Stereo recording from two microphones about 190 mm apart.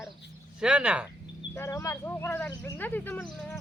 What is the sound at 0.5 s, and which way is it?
Speech, 5° right (ahead or behind).